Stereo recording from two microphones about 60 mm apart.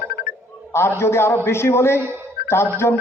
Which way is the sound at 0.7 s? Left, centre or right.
Left.